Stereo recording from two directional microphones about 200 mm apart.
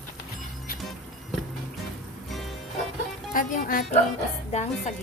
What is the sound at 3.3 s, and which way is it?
A woman's voice, 45° left (ahead or behind).